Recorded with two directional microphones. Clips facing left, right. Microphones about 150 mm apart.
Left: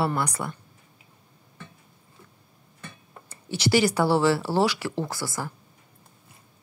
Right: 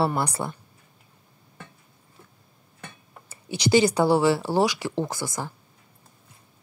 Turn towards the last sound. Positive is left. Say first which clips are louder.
# right 2 dB
turn(degrees=-20)  # may be behind; listen again after turning